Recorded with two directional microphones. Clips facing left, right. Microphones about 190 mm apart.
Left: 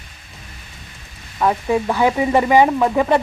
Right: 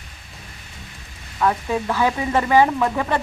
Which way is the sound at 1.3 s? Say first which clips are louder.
Left 3 dB; 15° left (ahead or behind).